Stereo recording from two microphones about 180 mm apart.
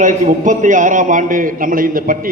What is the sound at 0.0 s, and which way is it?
A man's voice, 45° right (ahead or behind).